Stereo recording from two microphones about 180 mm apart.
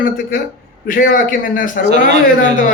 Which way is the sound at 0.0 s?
50° left (ahead or behind).